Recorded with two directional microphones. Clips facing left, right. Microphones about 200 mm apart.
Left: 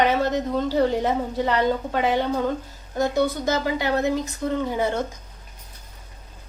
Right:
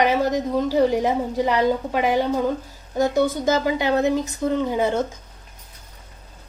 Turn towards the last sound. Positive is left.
turn(degrees=-15)  # may be behind; listen again after turning